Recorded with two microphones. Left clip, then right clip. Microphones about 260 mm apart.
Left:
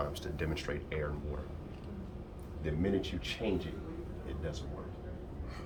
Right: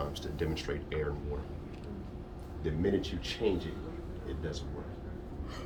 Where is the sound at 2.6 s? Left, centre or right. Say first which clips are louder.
Right 2 dB; centre.